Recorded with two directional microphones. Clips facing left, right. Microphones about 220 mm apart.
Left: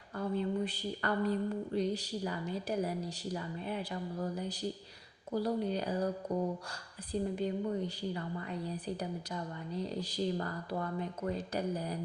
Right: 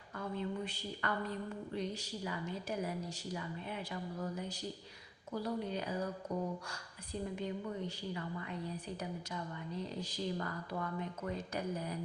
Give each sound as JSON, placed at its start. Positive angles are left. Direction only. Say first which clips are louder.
{"t": 0.2, "sound": "a woman's voice", "louder": "left 6 dB", "side_deg": 35}